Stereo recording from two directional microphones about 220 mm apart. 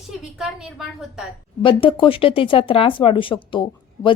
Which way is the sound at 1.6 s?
25° left (ahead or behind).